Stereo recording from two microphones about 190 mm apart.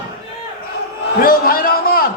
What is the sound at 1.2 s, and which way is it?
Speech, 50° left (ahead or behind).